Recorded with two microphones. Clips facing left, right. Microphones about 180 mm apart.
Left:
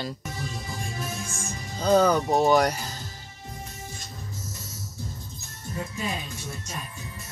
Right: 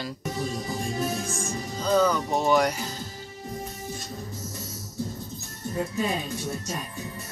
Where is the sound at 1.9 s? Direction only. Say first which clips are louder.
Left 3 dB; 35° left (ahead or behind).